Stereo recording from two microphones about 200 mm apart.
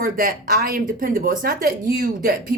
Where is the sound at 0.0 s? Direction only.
45° right (ahead or behind).